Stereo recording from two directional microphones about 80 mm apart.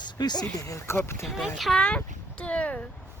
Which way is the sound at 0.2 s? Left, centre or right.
Left.